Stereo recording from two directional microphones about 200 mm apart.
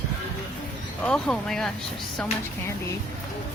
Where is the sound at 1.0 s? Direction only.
5° left (ahead or behind).